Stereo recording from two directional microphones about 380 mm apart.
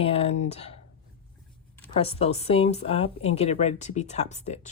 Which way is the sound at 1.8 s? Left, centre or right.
Centre.